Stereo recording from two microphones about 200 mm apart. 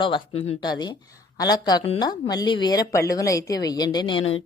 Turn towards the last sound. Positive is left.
turn(degrees=20)  # may be behind; listen again after turning